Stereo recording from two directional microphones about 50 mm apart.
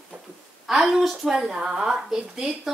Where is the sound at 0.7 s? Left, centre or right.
Centre.